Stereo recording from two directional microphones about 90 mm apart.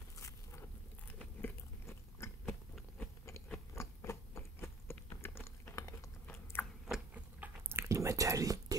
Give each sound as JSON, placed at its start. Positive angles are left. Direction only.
{"t": 0.2, "sound": "a sound", "side_deg": 30}
{"t": 1.0, "sound": "biting", "side_deg": 25}
{"t": 3.7, "sound": "biting", "side_deg": 35}
{"t": 5.2, "sound": "typing", "side_deg": 25}
{"t": 6.2, "sound": "chewing", "side_deg": 15}
{"t": 6.9, "sound": "chewing", "side_deg": -15}